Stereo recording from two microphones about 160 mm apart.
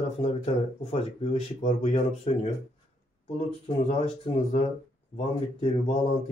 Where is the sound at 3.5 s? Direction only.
40° left (ahead or behind).